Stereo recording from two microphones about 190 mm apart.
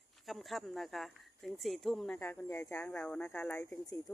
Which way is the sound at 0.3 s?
Centre (ahead or behind).